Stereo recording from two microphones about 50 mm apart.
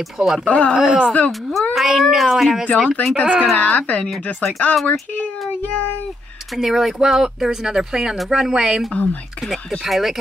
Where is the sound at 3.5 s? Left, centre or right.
Left.